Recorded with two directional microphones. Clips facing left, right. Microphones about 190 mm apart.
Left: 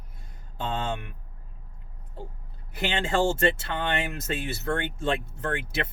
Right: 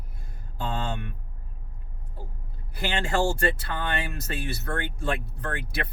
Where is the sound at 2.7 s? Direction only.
20° left (ahead or behind).